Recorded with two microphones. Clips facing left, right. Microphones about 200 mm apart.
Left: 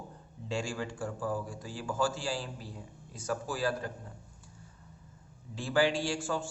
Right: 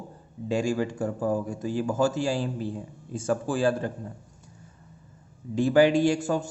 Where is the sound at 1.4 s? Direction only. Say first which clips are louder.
Right 11 dB; 20° right (ahead or behind).